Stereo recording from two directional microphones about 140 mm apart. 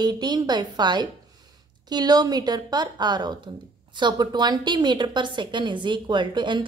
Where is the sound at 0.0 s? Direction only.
30° right (ahead or behind).